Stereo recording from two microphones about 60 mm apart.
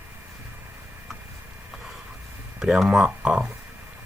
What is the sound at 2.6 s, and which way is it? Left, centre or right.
Speech, centre.